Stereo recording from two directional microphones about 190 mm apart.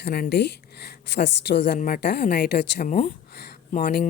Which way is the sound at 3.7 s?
45° left (ahead or behind).